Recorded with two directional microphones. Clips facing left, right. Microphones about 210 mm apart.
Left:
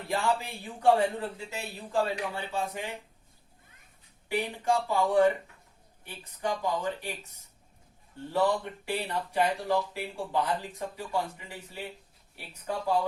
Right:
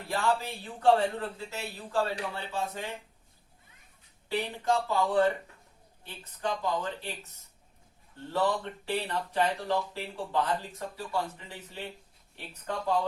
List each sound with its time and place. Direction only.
0.1 s speech: 15° left (ahead or behind)
4.3 s speech: 10° left (ahead or behind)
8.3 s speech: 10° left (ahead or behind)